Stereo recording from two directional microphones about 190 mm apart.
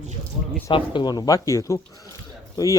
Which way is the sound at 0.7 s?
25° left (ahead or behind).